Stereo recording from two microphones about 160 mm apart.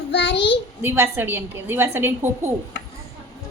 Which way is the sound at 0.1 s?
90° left.